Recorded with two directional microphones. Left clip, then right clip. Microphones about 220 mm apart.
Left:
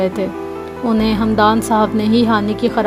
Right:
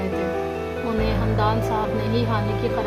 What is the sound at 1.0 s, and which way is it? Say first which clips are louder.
Speech: left 10 dB; 40° left (ahead or behind).